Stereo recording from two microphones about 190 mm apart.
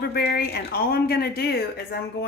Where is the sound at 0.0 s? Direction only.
55° left (ahead or behind).